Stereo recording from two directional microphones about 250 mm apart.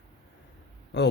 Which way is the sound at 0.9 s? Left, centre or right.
Left.